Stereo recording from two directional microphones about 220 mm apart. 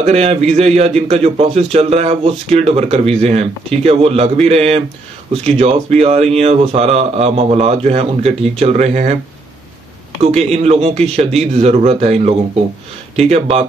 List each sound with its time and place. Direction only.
0.0 s speech: 30° right (ahead or behind)
10.2 s speech: 30° right (ahead or behind)